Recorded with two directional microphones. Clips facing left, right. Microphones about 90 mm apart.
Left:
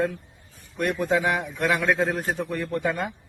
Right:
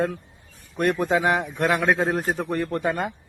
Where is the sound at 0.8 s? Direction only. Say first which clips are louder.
Right 2 dB; 40° right (ahead or behind).